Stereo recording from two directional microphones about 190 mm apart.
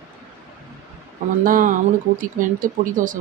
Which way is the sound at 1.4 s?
45° right (ahead or behind).